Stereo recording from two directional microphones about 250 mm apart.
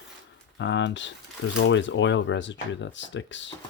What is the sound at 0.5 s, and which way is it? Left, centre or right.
Speech, left.